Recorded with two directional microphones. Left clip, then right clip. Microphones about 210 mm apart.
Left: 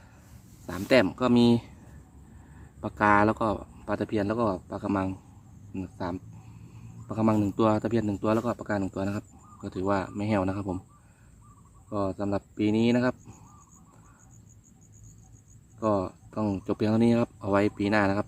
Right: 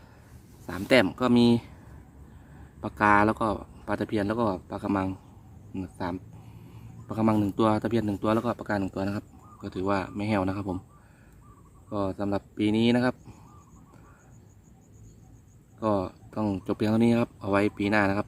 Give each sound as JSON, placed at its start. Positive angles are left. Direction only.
{"t": 0.9, "sound": "speech", "side_deg": -5}
{"t": 2.8, "sound": "speech", "side_deg": 0}
{"t": 11.9, "sound": "speech", "side_deg": -5}
{"t": 15.8, "sound": "speech", "side_deg": -10}